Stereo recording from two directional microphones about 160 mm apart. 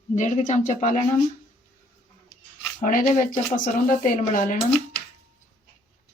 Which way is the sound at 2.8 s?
50° left (ahead or behind).